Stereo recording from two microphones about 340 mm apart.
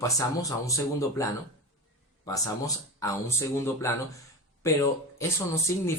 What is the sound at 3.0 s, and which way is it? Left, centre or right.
Speech, centre.